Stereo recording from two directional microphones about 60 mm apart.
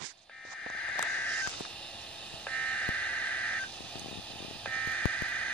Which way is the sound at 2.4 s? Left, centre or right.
Centre.